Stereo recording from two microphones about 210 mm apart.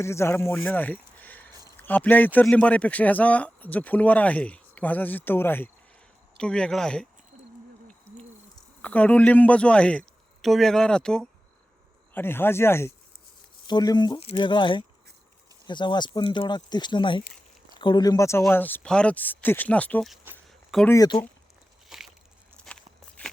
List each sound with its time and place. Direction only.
0.0 s a man's voice: 10° left (ahead or behind)
8.8 s a man's voice: 5° left (ahead or behind)
20.9 s speech: 15° left (ahead or behind)
21.8 s a sound: centre (ahead or behind)